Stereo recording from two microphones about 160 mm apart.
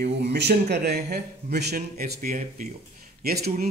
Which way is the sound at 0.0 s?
85° right.